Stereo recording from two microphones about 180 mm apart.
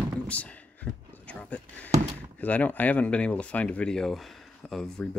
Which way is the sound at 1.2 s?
5° left (ahead or behind).